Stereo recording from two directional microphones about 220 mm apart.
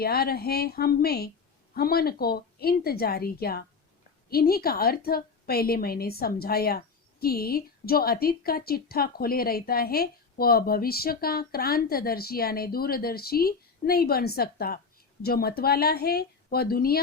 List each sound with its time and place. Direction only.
0.0 s a woman's voice: 45° left (ahead or behind)